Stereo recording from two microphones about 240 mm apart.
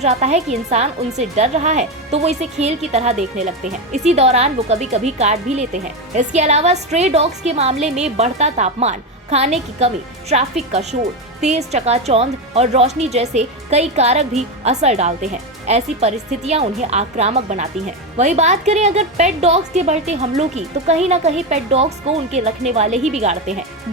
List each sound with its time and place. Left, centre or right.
0.0 s a woman's voice: right